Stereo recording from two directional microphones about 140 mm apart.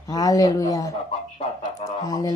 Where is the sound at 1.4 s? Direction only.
55° left (ahead or behind).